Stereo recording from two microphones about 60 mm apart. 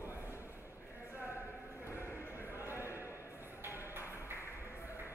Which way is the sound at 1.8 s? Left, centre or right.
Left.